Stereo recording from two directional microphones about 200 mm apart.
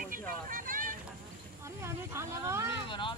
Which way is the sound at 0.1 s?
45° right (ahead or behind).